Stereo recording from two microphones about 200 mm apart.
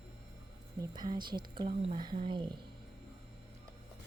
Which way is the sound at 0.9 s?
20° right (ahead or behind).